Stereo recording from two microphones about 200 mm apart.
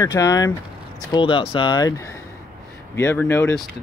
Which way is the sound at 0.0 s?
15° left (ahead or behind).